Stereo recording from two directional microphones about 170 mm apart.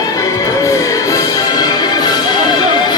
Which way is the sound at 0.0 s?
20° left (ahead or behind).